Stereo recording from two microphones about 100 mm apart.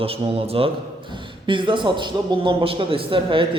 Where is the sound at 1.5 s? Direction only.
55° right (ahead or behind).